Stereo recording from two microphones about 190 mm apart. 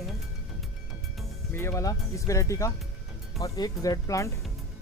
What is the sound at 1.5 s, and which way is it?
Speech, 15° left (ahead or behind).